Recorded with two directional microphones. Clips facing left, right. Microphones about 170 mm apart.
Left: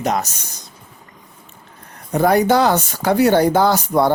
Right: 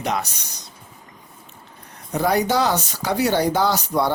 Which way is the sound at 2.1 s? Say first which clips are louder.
Left 5 dB; 50° left (ahead or behind).